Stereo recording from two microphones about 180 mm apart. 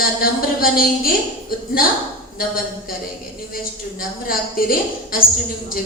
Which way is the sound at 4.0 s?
55° left (ahead or behind).